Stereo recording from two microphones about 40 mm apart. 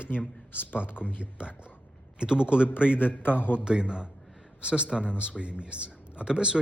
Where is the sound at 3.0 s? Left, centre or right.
Left.